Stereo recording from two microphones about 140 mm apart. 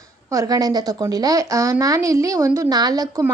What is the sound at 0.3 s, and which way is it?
Speech, 25° right (ahead or behind).